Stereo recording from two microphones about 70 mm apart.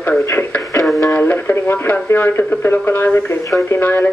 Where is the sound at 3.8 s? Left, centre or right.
Left.